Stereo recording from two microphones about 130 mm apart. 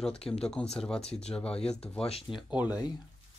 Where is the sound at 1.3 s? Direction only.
5° left (ahead or behind).